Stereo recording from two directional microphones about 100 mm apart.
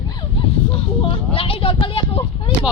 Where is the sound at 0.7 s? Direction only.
70° left (ahead or behind).